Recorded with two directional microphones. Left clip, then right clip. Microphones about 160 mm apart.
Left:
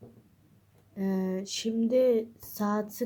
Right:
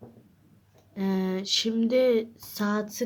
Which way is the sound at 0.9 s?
25° right (ahead or behind).